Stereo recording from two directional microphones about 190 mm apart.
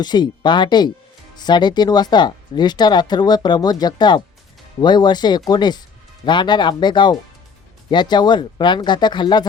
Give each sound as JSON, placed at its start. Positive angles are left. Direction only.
{"t": 0.0, "sound": "speech", "side_deg": 25}